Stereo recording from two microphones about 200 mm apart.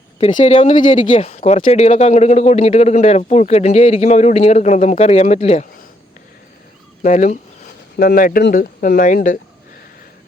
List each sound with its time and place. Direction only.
0.3 s speech: 30° left (ahead or behind)
7.0 s speech: 40° left (ahead or behind)